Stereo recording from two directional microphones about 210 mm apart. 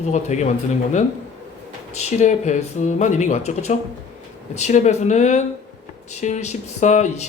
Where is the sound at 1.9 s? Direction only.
35° left (ahead or behind).